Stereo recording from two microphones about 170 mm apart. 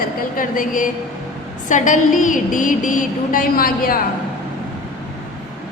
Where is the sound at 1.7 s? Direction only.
50° left (ahead or behind).